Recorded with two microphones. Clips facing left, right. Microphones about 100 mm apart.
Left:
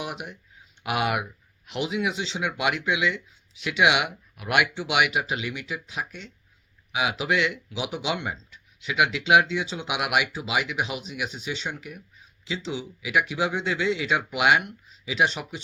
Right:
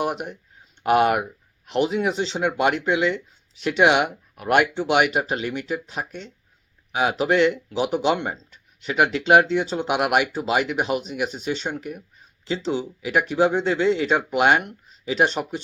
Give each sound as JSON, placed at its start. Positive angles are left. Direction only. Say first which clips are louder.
{"t": 0.0, "sound": "speech", "louder": "right 8 dB", "side_deg": -45}